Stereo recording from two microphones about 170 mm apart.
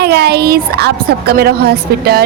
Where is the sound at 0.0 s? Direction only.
75° right (ahead or behind).